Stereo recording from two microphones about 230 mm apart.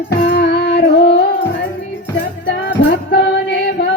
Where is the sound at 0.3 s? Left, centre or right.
Left.